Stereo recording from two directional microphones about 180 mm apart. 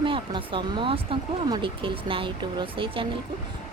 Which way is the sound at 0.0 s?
30° right (ahead or behind).